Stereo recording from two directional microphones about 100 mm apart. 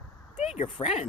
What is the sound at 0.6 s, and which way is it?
Speech, 65° left (ahead or behind).